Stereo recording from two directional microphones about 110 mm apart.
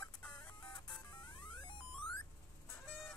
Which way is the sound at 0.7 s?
40° left (ahead or behind).